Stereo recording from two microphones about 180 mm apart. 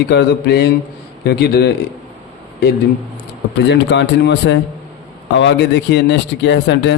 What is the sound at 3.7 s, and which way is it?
Speech, 85° left.